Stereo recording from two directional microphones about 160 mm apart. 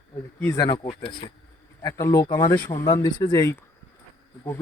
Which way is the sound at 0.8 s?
35° left (ahead or behind).